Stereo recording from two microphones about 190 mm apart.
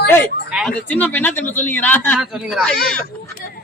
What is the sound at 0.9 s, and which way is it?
A man's voice, 10° left (ahead or behind).